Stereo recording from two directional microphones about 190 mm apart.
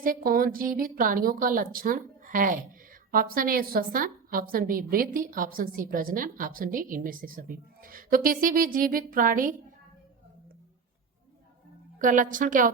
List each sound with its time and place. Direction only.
0.0 s a woman's voice: 50° right (ahead or behind)
11.9 s a woman's voice: 45° right (ahead or behind)